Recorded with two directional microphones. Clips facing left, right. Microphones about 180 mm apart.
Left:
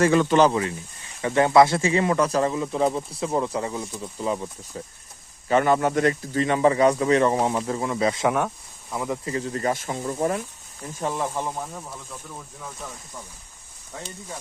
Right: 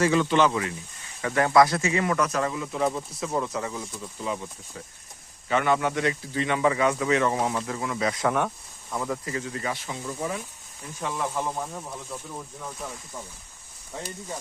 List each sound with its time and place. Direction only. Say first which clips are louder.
0.0 s speech: left 4 dB; 50° left (ahead or behind); by 0.7 s 35° left (ahead or behind)
1.2 s speech: left 3 dB; 25° left (ahead or behind)
5.5 s speech: left 4 dB; 40° left (ahead or behind)
8.3 s speech: left 2 dB; 5° left (ahead or behind)
9.2 s speech: left 5 dB; 35° left (ahead or behind)
11.5 s speech: even; centre (ahead or behind)
13.9 s speech: right 1 dB; 10° right (ahead or behind)